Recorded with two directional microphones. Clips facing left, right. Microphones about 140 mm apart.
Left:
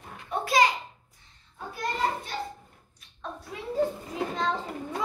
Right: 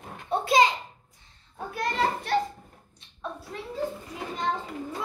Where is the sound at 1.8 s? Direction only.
65° right (ahead or behind).